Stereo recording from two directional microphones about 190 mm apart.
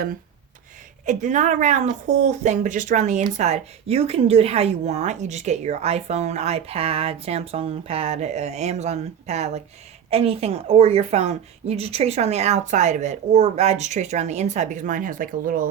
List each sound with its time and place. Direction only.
1.0 s a woman's voice: 40° right (ahead or behind)